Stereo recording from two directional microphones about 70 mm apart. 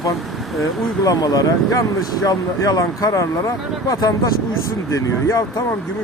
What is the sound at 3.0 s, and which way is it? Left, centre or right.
Speech, left.